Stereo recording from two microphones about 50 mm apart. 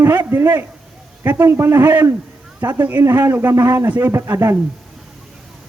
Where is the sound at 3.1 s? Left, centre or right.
Right.